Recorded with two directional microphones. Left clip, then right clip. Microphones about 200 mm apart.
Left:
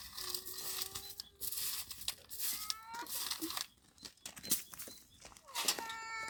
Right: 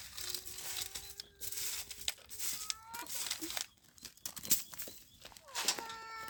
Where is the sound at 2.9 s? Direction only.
10° right (ahead or behind).